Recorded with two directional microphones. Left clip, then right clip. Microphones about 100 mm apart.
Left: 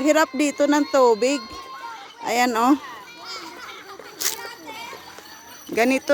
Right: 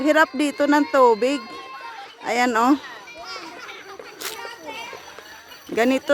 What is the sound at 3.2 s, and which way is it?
Children playing, 25° left (ahead or behind).